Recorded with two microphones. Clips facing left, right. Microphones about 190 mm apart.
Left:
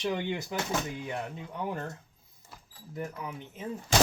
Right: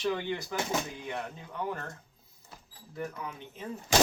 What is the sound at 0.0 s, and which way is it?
Speech, 15° left (ahead or behind).